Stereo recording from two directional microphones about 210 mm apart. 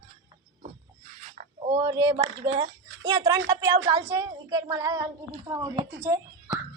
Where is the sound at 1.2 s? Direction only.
35° right (ahead or behind).